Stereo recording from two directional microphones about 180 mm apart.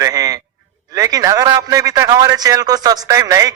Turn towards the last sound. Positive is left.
turn(degrees=-20)  # may be behind; listen again after turning